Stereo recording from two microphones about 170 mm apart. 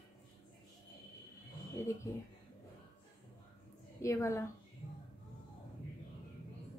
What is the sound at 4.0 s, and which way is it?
Speech, 15° left (ahead or behind).